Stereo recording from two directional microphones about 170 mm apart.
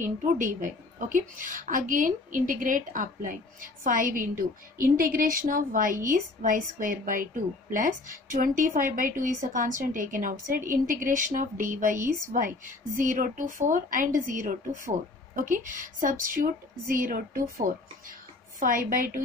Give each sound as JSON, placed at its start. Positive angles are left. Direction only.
{"t": 0.0, "sound": "speech", "side_deg": -50}